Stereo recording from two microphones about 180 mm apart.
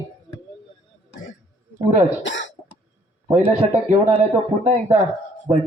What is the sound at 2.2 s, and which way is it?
Cough, 90° left.